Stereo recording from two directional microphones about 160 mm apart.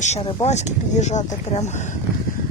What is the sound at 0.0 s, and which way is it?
Speech, 40° left (ahead or behind).